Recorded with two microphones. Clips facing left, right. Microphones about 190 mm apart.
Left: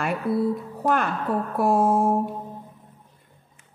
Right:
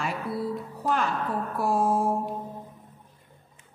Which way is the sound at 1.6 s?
55° left (ahead or behind).